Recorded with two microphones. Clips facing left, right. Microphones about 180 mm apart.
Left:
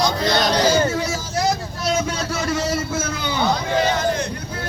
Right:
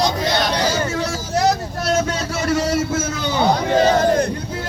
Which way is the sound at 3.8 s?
45° right (ahead or behind).